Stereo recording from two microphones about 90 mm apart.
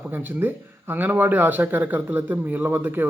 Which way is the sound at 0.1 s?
20° right (ahead or behind).